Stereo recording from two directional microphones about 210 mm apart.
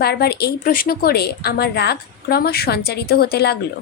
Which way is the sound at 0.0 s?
50° left (ahead or behind).